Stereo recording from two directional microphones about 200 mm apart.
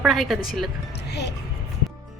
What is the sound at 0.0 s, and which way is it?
Speech, centre (ahead or behind).